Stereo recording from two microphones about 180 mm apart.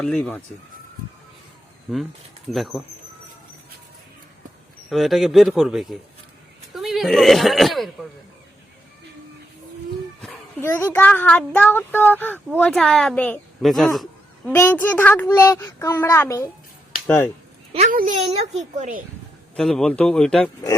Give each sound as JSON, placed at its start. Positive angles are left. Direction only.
{"t": 0.0, "sound": "a child's voice", "side_deg": 5}
{"t": 2.5, "sound": "a man's voice", "side_deg": 0}
{"t": 4.9, "sound": "a man's voice", "side_deg": 0}
{"t": 10.2, "sound": "a child's voice", "side_deg": 10}
{"t": 17.9, "sound": "a child's voice", "side_deg": -45}
{"t": 19.5, "sound": "a man's voice", "side_deg": 5}